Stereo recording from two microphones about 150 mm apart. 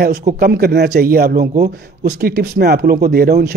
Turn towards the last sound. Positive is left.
turn(degrees=-90)